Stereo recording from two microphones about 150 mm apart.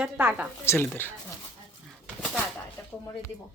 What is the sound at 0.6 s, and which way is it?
Speech, 15° left (ahead or behind).